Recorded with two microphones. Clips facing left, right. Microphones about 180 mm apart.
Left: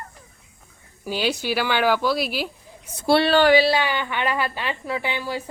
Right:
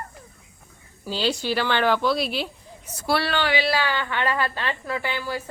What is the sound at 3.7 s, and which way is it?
A woman's voice, 15° left (ahead or behind).